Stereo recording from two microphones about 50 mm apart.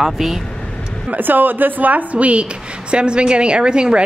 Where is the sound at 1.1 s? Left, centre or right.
Right; by 4.0 s centre.